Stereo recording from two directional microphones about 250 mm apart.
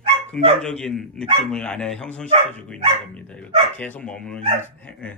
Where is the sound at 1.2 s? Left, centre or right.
Right.